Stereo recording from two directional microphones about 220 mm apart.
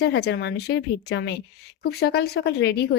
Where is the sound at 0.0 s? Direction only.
50° left (ahead or behind).